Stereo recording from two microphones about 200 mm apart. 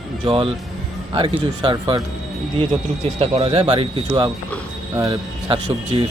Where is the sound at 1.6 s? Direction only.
25° right (ahead or behind).